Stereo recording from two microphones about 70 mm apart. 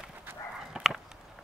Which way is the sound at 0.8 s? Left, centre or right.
Centre.